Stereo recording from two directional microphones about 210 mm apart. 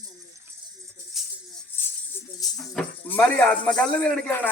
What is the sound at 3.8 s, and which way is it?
Speech, 10° left (ahead or behind).